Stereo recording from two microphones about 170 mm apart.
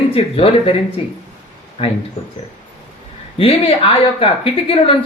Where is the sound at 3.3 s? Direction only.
35° left (ahead or behind).